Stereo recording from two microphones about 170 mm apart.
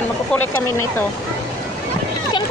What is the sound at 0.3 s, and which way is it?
Speech, 10° left (ahead or behind).